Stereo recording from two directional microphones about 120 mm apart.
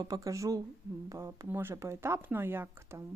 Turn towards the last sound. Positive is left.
turn(degrees=-20)  # may be behind; listen again after turning